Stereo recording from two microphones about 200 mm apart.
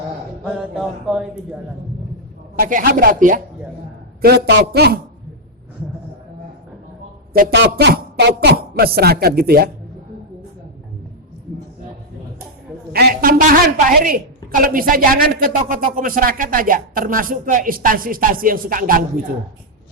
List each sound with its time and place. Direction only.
0.4 s speech: centre (ahead or behind)
2.6 s speech: 45° right (ahead or behind)
4.2 s a woman's voice: 55° right (ahead or behind)
7.5 s a woman's voice: 60° right (ahead or behind)
12.9 s a woman's voice: 50° right (ahead or behind)